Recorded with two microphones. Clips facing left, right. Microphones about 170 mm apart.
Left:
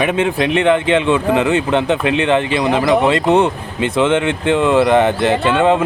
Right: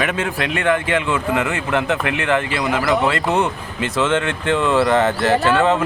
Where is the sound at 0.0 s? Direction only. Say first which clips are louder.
Left 6 dB; 20° left (ahead or behind).